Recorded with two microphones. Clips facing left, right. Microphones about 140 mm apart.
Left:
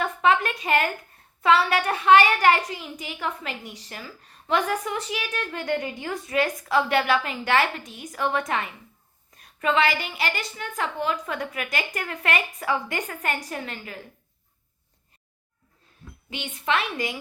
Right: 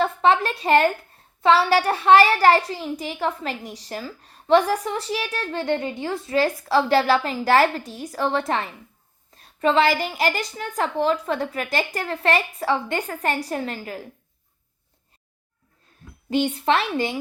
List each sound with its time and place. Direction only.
0.0 s a sound: 30° right (ahead or behind)
1.4 s a woman's voice: 30° right (ahead or behind)
16.3 s a woman's voice: 35° right (ahead or behind)